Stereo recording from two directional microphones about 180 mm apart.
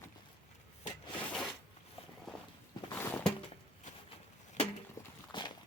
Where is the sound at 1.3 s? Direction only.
Centre (ahead or behind).